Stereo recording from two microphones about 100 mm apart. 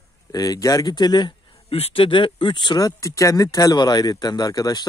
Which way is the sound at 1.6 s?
80° left.